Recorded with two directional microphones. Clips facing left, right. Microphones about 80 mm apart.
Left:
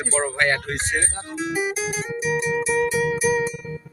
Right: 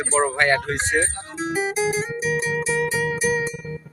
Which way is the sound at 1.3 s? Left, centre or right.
Right.